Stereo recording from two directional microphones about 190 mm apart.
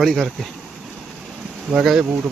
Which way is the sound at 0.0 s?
Centre (ahead or behind).